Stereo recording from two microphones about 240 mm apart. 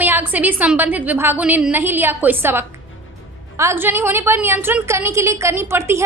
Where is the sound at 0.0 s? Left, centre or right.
Centre.